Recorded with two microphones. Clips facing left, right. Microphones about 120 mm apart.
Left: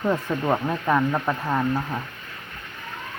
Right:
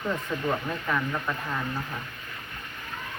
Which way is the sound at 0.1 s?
50° left (ahead or behind).